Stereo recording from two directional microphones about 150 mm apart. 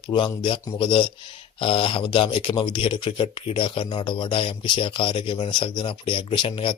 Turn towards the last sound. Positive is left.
turn(degrees=35)  # may be behind; listen again after turning